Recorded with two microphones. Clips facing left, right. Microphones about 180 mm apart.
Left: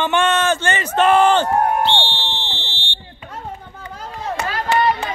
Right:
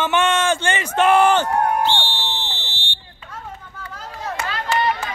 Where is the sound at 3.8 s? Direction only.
25° left (ahead or behind).